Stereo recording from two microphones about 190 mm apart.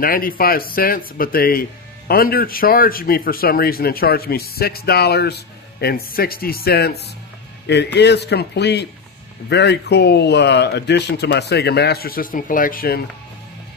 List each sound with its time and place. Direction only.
0.0 s a man's voice: 50° left (ahead or behind)